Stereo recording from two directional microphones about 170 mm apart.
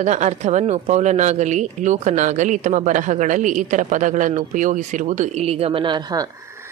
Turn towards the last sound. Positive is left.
turn(degrees=-20)  # may be behind; listen again after turning